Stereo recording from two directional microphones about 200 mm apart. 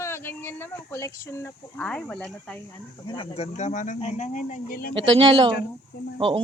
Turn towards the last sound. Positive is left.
turn(degrees=-25)  # may be behind; listen again after turning